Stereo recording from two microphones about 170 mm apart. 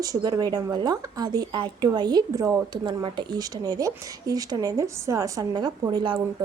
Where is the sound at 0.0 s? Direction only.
20° right (ahead or behind).